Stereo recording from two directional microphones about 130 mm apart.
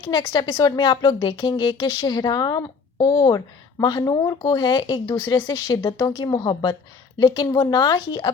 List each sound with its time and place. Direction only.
0.0 s speech: 30° left (ahead or behind)